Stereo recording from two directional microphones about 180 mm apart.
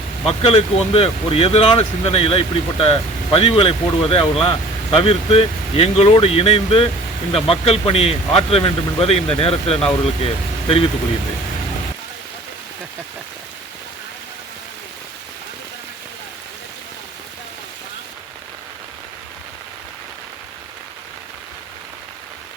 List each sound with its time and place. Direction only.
0.3 s speech: 35° left (ahead or behind)